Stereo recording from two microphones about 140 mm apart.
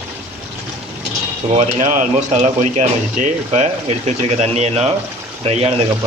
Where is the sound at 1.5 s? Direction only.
55° right (ahead or behind).